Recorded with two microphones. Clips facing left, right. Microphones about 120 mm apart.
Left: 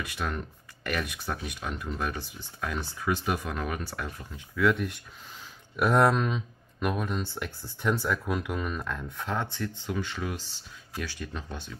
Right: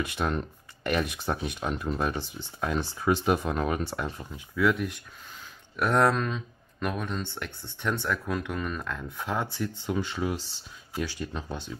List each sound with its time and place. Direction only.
0.1 s speech: 25° right (ahead or behind)
4.6 s speech: centre (ahead or behind); by 11.4 s 20° right (ahead or behind)